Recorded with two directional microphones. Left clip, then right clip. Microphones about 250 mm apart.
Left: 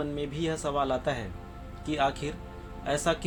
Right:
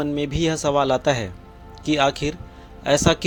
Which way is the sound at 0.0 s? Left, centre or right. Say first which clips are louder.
Right 9 dB; right.